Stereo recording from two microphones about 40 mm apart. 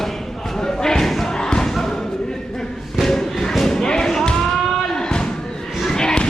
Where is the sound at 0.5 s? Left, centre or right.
Centre.